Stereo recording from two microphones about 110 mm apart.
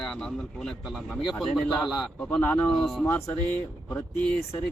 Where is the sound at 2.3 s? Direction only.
15° left (ahead or behind).